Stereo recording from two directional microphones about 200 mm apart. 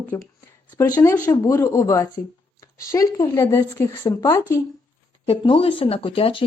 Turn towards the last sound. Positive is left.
turn(degrees=25)  # may be behind; listen again after turning